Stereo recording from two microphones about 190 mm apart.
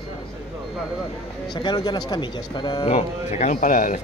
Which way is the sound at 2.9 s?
35° left (ahead or behind).